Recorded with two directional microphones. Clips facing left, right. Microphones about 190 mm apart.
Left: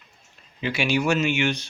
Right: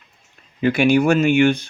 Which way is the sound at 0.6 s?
55° right (ahead or behind).